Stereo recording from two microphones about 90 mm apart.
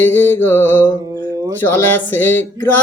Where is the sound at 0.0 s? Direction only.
25° left (ahead or behind).